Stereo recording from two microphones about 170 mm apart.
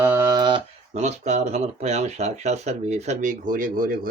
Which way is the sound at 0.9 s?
40° right (ahead or behind).